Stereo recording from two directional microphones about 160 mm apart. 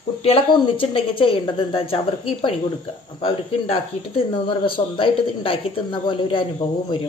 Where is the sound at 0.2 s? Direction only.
35° left (ahead or behind).